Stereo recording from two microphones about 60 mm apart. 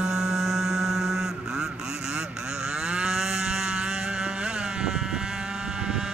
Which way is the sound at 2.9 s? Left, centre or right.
Centre.